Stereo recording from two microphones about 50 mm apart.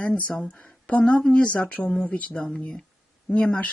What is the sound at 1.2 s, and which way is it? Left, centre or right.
Speech, centre.